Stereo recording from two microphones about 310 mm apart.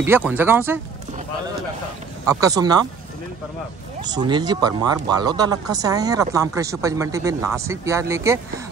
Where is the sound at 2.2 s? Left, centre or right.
Centre.